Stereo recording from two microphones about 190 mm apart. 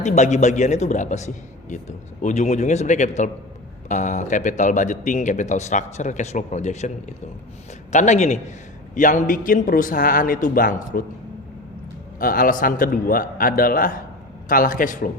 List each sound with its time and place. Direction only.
0.0 s speech: 40° left (ahead or behind)
7.9 s a man's voice: 35° left (ahead or behind)
12.2 s a man's voice: 50° left (ahead or behind)